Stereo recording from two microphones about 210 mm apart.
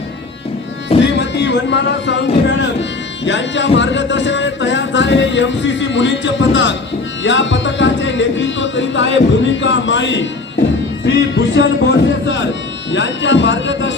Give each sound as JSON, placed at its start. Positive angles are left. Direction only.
{"t": 1.1, "sound": "music", "side_deg": 55}